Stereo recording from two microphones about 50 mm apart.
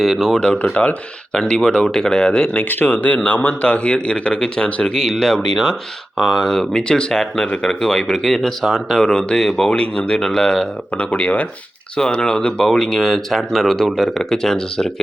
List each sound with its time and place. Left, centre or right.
0.0 s speech: centre
0.6 s speech: left
1.3 s speech: centre
2.8 s speech: left; by 10.7 s centre
10.9 s speech: left
11.9 s speech: centre
14.2 s speech: centre